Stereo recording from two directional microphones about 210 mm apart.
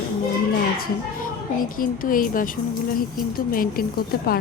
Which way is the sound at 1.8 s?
40° left (ahead or behind).